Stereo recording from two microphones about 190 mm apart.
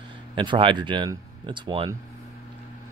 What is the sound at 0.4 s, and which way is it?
Speech, 25° right (ahead or behind).